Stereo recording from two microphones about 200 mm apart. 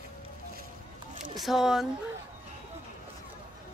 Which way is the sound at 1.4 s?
Centre (ahead or behind).